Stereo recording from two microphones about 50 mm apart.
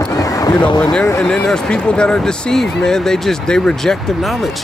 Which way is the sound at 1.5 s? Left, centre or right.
Centre.